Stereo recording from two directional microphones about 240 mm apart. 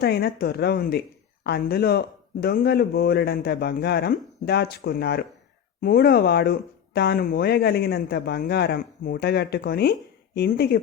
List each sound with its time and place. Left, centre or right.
0.0 s speech: left